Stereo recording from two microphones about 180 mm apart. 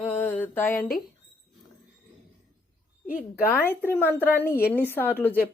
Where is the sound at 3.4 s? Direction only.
10° left (ahead or behind).